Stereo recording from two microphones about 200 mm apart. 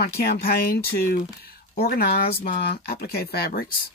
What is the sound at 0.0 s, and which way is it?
Speech, 50° left (ahead or behind).